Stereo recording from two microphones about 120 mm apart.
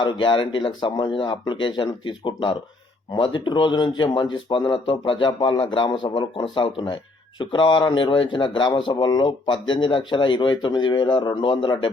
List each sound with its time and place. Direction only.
0.0 s speech: 45° left (ahead or behind)